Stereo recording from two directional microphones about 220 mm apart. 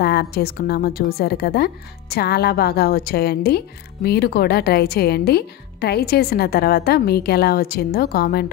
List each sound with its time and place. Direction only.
0.0 s a woman's voice: 45° left (ahead or behind)